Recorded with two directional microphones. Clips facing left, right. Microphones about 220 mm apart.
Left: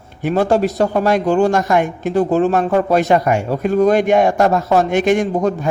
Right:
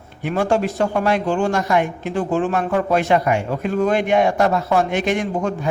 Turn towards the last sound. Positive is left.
turn(degrees=45)  # may be behind; listen again after turning